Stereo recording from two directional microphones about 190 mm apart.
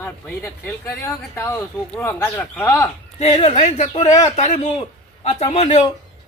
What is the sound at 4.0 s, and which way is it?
Speech, 20° left (ahead or behind).